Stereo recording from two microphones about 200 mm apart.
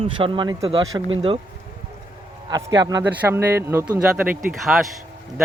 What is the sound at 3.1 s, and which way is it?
A man's voice, 10° right (ahead or behind).